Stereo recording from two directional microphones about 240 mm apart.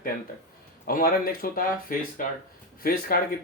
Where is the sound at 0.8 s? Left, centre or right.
Left.